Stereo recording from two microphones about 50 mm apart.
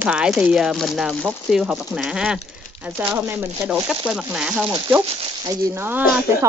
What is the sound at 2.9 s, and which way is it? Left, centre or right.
Speech, right.